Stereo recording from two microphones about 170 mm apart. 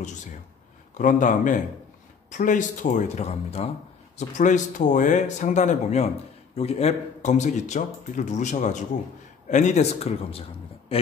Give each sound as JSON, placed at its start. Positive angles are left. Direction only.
{"t": 0.9, "sound": "speech", "side_deg": 50}